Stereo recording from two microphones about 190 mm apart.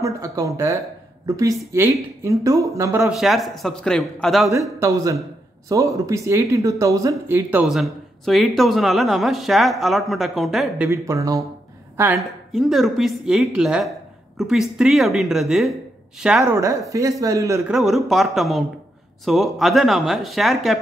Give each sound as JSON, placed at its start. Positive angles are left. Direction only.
{"t": 0.0, "sound": "speech", "side_deg": -15}
{"t": 3.1, "sound": "speech", "side_deg": 0}
{"t": 4.7, "sound": "speech", "side_deg": -15}
{"t": 10.9, "sound": "speech", "side_deg": -15}
{"t": 12.2, "sound": "speech", "side_deg": 0}
{"t": 16.5, "sound": "speech", "side_deg": -15}
{"t": 17.6, "sound": "speech", "side_deg": 0}